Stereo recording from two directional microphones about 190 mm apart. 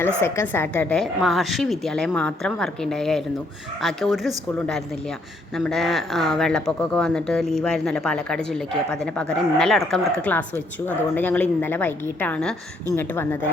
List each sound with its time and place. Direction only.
0.2 s speech: 15° left (ahead or behind)
5.5 s speech: centre (ahead or behind)